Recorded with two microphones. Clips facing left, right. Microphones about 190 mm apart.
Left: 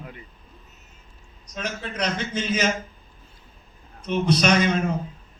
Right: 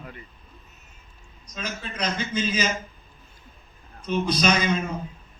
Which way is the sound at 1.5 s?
70° left (ahead or behind).